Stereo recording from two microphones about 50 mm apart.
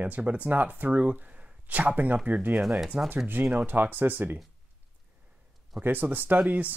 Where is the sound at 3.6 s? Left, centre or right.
Right.